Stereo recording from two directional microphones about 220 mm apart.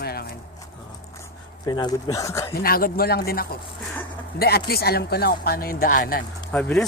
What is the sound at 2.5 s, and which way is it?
Speech, 40° left (ahead or behind).